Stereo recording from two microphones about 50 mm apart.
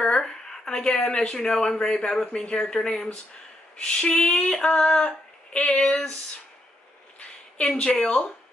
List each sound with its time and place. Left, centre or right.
0.0 s a sound: centre
0.9 s speech: left
2.5 s female singing: centre
3.8 s speech: left
4.6 s female singing: centre
7.7 s speech: left